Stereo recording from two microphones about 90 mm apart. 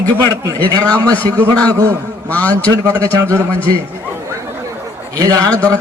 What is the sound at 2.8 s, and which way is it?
Speech, 35° right (ahead or behind).